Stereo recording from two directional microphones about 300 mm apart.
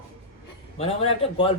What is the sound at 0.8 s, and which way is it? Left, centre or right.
Speech, centre.